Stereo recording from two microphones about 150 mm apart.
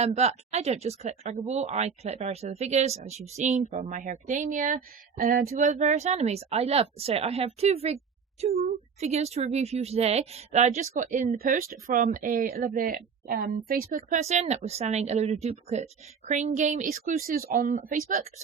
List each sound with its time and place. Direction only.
0.0 s speech: 45° right (ahead or behind)
9.0 s speech: 45° right (ahead or behind)
10.9 s speech: 60° right (ahead or behind)
16.8 s speech: 75° right (ahead or behind)